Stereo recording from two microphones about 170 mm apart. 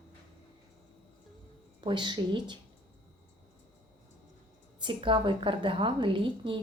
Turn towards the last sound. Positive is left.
turn(degrees=-30)  # may be behind; listen again after turning